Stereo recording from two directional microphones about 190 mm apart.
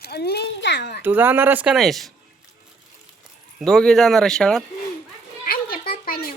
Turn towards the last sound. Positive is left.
turn(degrees=50)  # may be behind; listen again after turning